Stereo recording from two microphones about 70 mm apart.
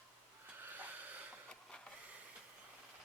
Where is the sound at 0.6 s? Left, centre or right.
Right.